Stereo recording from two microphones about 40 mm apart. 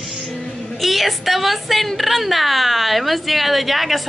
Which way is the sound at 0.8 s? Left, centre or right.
Centre.